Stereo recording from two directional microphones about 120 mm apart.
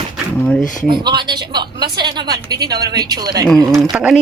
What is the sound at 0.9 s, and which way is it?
A woman's voice, 40° right (ahead or behind).